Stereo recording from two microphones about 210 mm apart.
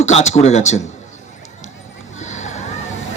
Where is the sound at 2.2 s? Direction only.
35° left (ahead or behind).